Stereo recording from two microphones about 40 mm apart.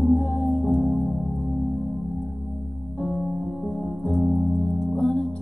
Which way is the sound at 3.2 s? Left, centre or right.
Centre.